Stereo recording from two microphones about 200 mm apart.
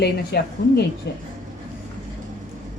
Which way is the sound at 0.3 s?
55° left (ahead or behind).